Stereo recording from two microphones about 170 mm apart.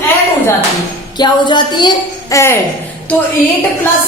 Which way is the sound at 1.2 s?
25° left (ahead or behind).